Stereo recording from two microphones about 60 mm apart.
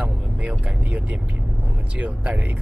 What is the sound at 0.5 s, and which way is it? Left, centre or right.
Speech, centre.